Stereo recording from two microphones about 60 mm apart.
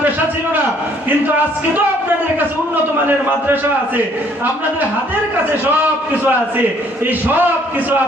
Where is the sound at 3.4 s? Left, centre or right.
Right.